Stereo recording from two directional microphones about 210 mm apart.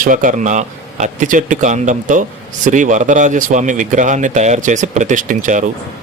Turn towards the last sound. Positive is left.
turn(degrees=-35)  # may be behind; listen again after turning